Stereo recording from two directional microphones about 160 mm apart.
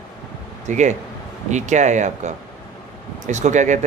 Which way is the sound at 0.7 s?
50° right (ahead or behind).